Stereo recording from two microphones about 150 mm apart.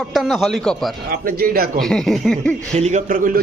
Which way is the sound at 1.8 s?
Centre (ahead or behind).